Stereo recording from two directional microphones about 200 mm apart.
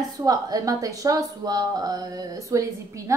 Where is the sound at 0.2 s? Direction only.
20° right (ahead or behind).